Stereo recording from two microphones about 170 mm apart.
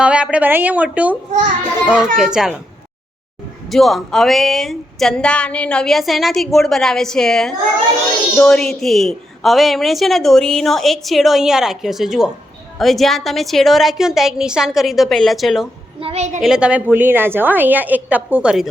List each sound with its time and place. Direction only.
0.0 s a woman's voice: 5° right (ahead or behind)
3.7 s a woman's voice: centre (ahead or behind)
16.0 s a woman's voice: 35° right (ahead or behind)
16.4 s a woman's voice: 5° right (ahead or behind)